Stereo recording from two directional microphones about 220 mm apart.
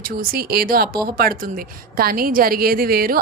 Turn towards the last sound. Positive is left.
turn(degrees=-40)  # may be behind; listen again after turning